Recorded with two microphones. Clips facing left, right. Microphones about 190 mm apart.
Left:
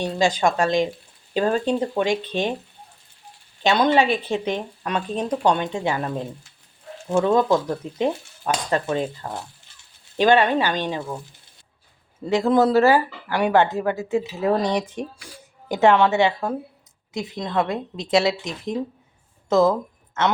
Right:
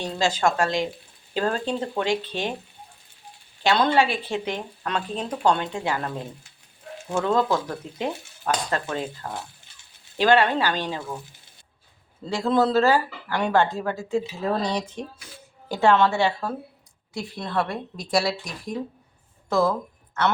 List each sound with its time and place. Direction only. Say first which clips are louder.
0.0 s speech: left 3 dB; 15° left (ahead or behind)
3.6 s speech: left 2 dB; 20° left (ahead or behind)
7.1 s speech: left 4 dB; 10° left (ahead or behind)
10.2 s speech: left 2 dB; 20° left (ahead or behind)
12.2 s a woman's voice: left 4 dB; 15° left (ahead or behind)